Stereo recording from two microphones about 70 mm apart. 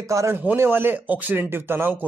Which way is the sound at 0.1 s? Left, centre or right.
Right.